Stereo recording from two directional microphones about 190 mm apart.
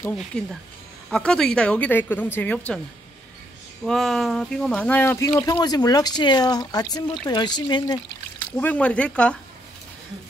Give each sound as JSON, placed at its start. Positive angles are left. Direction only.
{"t": 0.1, "sound": "a woman's voice", "side_deg": 0}
{"t": 3.8, "sound": "speech", "side_deg": 0}
{"t": 8.5, "sound": "a woman's voice", "side_deg": 5}